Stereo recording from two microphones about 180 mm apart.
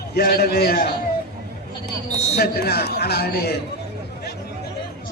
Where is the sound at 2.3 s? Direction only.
65° left (ahead or behind).